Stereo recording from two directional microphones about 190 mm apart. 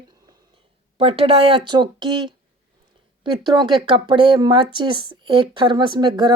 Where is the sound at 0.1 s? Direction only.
20° right (ahead or behind).